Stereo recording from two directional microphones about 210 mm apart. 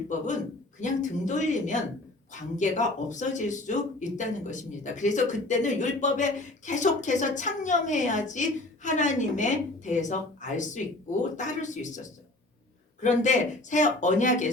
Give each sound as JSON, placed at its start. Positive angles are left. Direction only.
{"t": 0.8, "sound": "speech", "side_deg": 35}